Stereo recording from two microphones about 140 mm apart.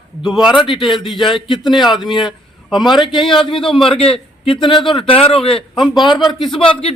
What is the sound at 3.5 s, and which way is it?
A man's voice, 40° left (ahead or behind).